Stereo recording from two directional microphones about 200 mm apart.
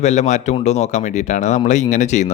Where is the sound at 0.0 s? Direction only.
35° left (ahead or behind).